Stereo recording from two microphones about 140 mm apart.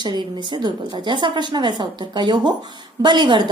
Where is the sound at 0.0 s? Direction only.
35° right (ahead or behind).